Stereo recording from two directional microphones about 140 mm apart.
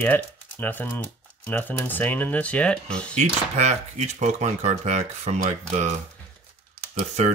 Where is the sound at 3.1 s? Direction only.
55° right (ahead or behind).